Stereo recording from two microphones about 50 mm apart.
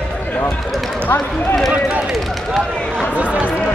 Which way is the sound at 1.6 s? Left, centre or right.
Centre.